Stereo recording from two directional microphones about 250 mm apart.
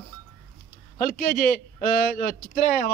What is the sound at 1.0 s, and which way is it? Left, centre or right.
A man's voice, left.